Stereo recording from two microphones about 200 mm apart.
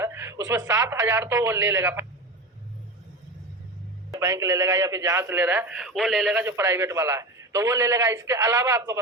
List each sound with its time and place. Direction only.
0.0 s a man's voice: 15° right (ahead or behind)
4.2 s a man's voice: 15° right (ahead or behind)